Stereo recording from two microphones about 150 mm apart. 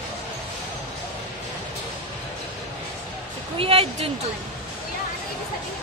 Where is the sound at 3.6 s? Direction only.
40° right (ahead or behind).